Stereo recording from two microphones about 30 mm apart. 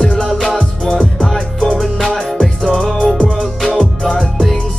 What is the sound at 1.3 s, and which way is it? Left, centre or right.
Music, centre.